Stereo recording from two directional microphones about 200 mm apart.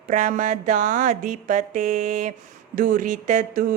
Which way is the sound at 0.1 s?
40° right (ahead or behind).